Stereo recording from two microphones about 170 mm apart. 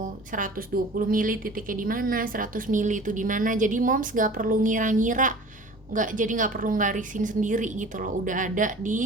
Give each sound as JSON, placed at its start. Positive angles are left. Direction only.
{"t": 0.9, "sound": "a woman's voice", "side_deg": -55}